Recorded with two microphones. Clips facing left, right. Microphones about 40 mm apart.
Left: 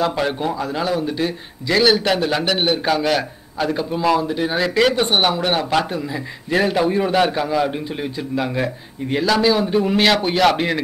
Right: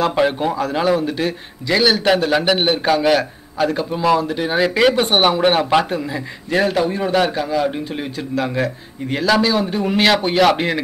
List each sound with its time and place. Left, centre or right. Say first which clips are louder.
0.2 s a man's voice: right 4 dB; centre
7.9 s speech: even; centre
8.4 s a man's voice: right 2 dB; centre